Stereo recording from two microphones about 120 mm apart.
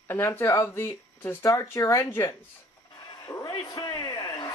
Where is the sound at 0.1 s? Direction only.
20° left (ahead or behind).